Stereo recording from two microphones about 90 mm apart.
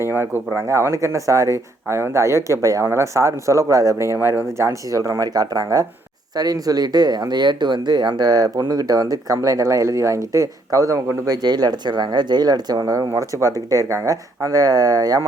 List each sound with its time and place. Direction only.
0.0 s speech: 25° right (ahead or behind)
11.4 s speech: 50° right (ahead or behind)